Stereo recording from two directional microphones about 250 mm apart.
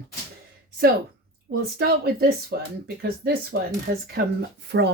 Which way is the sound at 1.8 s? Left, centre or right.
Right.